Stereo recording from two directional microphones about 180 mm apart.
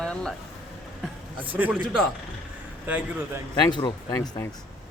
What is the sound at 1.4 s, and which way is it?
Speech, 10° right (ahead or behind).